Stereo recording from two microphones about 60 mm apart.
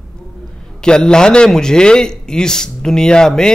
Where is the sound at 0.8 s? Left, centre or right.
Centre.